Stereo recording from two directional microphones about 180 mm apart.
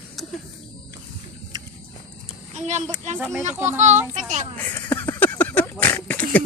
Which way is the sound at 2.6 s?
40° right (ahead or behind).